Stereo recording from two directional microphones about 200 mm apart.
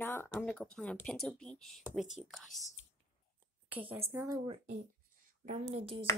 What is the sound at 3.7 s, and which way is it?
Speech, 10° right (ahead or behind).